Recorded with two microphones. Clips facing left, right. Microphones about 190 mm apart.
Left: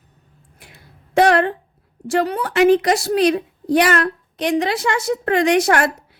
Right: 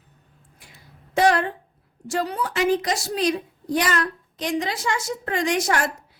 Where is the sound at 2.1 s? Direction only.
65° left (ahead or behind).